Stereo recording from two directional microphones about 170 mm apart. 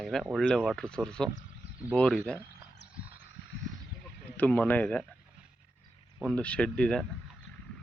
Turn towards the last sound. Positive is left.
turn(degrees=5)  # may be behind; listen again after turning